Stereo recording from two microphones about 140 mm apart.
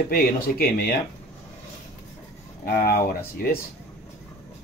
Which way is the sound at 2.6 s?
90° left.